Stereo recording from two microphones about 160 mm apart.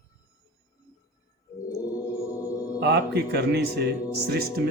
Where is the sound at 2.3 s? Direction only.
20° left (ahead or behind).